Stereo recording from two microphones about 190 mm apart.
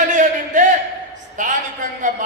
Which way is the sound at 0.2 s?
40° right (ahead or behind).